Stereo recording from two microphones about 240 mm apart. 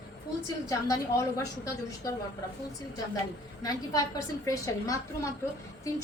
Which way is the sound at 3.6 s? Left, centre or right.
Centre.